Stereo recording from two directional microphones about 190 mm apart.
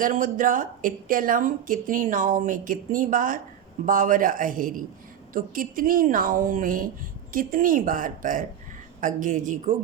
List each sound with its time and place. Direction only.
0.0 s speech: 45° right (ahead or behind)